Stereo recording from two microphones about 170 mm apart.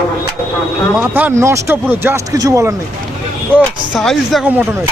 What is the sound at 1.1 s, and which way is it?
Speech, 15° right (ahead or behind).